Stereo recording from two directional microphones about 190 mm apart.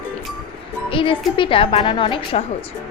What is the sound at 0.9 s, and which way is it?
A woman's voice, 25° left (ahead or behind).